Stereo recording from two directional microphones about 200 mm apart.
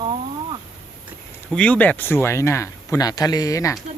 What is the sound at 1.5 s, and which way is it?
Speech, 5° left (ahead or behind).